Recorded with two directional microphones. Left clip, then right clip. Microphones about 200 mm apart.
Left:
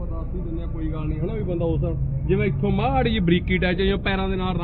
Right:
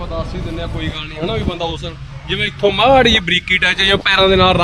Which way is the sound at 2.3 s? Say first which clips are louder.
Right 8 dB; 60° right (ahead or behind).